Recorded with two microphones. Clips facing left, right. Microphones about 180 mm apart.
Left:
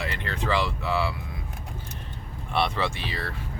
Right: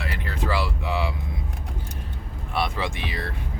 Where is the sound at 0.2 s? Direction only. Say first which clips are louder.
Even; 5° right (ahead or behind).